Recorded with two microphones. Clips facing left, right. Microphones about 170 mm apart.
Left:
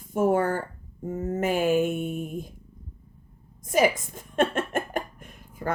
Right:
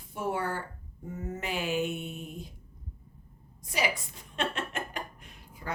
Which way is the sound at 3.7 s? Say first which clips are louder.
Left 10 dB; 50° left (ahead or behind).